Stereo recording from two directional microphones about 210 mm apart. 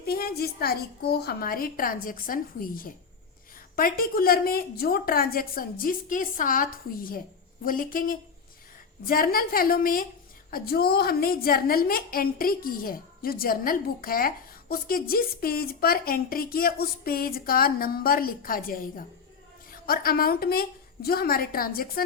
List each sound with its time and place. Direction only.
0.0 s a woman's voice: 45° left (ahead or behind)